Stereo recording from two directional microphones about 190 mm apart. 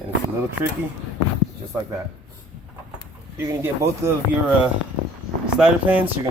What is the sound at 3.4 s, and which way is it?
Speech, 15° right (ahead or behind).